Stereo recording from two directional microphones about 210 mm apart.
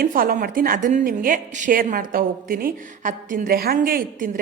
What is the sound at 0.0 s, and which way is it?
A woman's voice, 45° right (ahead or behind).